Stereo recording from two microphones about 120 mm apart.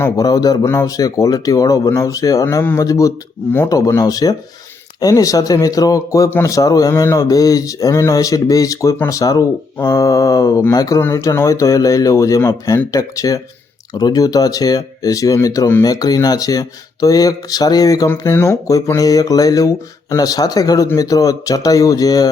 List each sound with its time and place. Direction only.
0.2 s speech: 30° left (ahead or behind)